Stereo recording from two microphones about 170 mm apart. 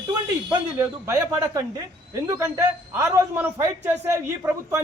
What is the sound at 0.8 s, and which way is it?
Speech, 15° right (ahead or behind).